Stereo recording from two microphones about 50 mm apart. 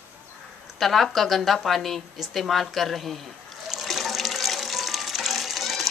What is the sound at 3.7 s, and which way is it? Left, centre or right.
Water, centre.